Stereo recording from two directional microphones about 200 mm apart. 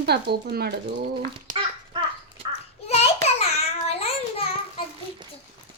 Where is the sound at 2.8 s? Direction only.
30° left (ahead or behind).